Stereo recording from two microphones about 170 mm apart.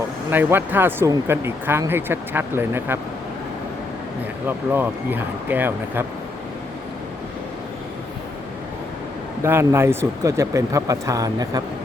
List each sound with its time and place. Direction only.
0.3 s speech: 10° right (ahead or behind)
4.4 s speech: 10° right (ahead or behind)
9.4 s speech: 15° right (ahead or behind)